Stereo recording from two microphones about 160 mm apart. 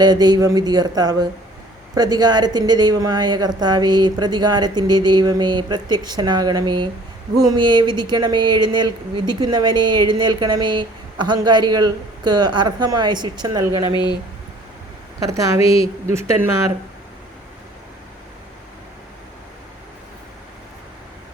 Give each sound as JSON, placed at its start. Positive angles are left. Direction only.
{"t": 0.0, "sound": "speech", "side_deg": -25}
{"t": 13.9, "sound": "speech", "side_deg": 25}
{"t": 15.2, "sound": "speech", "side_deg": -20}